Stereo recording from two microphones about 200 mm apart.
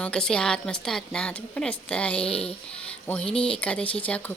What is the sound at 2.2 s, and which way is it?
Speech, 30° left (ahead or behind).